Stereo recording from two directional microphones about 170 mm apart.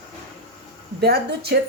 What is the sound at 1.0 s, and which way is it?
Speech, 70° right (ahead or behind).